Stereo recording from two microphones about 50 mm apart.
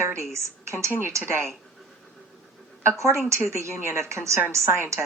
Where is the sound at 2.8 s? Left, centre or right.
Right.